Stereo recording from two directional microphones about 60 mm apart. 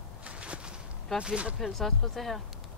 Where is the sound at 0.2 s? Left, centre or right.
Centre.